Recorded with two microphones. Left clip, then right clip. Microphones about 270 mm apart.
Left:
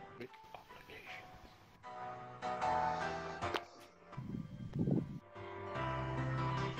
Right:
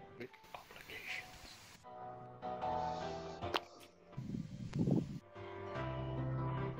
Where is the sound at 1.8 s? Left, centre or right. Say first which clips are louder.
Left 4 dB; left.